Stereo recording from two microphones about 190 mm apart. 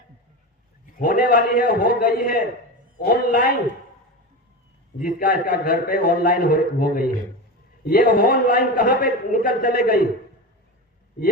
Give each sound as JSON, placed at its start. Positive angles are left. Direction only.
{"t": 0.9, "sound": "a man's voice", "side_deg": 45}
{"t": 4.9, "sound": "a man's voice", "side_deg": 50}